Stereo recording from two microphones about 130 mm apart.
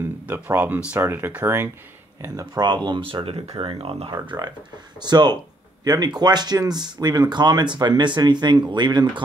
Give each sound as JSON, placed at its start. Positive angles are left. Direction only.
{"t": 0.3, "sound": "speech", "side_deg": -15}
{"t": 2.2, "sound": "speech", "side_deg": -25}